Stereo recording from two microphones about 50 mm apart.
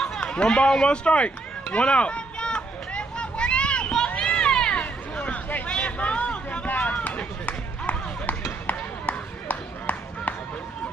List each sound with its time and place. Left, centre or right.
0.2 s run: left
4.2 s cat: centre
5.7 s vehicle: left
6.7 s run: left
8.6 s a sound: left